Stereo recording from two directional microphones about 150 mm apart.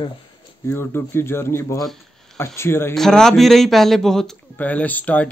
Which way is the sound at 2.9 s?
5° left (ahead or behind).